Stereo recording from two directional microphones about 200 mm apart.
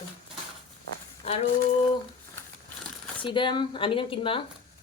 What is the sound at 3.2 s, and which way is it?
Speech, 25° left (ahead or behind).